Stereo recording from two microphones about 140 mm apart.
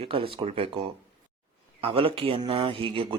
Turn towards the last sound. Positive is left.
turn(degrees=-40)  # may be behind; listen again after turning